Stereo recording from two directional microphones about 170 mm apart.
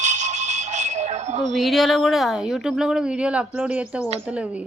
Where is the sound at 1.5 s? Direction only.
Centre (ahead or behind).